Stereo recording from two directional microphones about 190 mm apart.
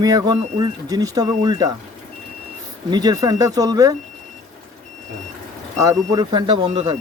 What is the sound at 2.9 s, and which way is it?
Speech, 20° right (ahead or behind).